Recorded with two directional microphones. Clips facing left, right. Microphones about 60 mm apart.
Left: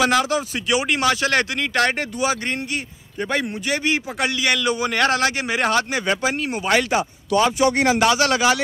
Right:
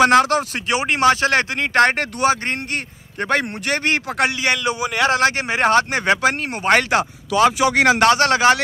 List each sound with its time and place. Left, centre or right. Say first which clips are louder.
0.0 s a man's voice: right 5 dB; right
0.7 s a man's voice: right 3 dB; right
4.4 s a man's voice: even; right
4.8 s speech: right 1 dB; centre
5.1 s speech: right 3 dB; right
6.9 s speech: right 1 dB; right
8.1 s a man's voice: right 3 dB; right